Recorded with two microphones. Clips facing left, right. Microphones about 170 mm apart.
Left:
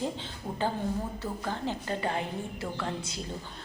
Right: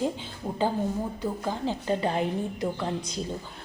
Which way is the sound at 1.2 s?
15° right (ahead or behind).